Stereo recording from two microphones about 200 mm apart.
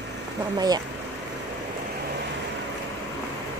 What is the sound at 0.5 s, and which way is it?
Speech, 20° right (ahead or behind).